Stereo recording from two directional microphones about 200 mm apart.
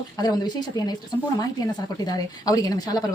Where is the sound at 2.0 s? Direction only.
20° left (ahead or behind).